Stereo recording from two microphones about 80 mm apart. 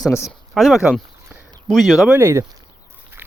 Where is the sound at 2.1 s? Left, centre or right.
Right.